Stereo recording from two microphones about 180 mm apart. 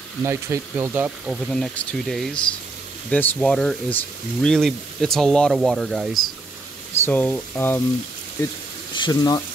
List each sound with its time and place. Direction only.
0.2 s speech: 15° right (ahead or behind)
1.2 s speech: centre (ahead or behind)
8.9 s speech: 25° left (ahead or behind)